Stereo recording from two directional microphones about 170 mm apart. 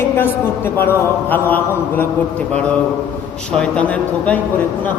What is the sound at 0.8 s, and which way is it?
Speech, 10° left (ahead or behind).